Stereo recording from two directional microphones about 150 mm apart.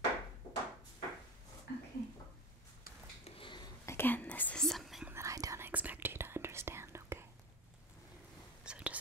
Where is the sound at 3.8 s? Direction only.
15° left (ahead or behind); by 5.1 s centre (ahead or behind).